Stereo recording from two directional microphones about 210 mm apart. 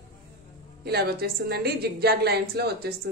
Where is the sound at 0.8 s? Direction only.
50° right (ahead or behind).